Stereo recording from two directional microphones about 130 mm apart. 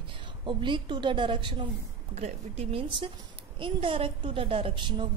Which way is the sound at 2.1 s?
55° right (ahead or behind).